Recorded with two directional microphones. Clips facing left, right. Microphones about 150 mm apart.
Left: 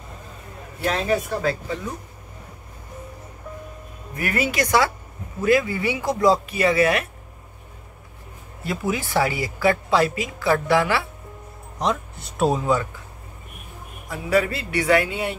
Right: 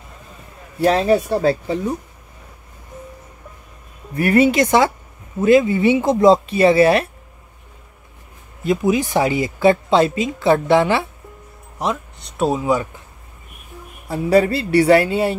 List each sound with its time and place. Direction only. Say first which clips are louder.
0.8 s speech: right 7 dB; 30° right (ahead or behind)
4.1 s speech: right 10 dB; 30° right (ahead or behind)
8.6 s speech: right 8 dB; 20° right (ahead or behind)
11.8 s speech: right 1 dB; centre (ahead or behind)
14.0 s speech: right 6 dB; 30° right (ahead or behind)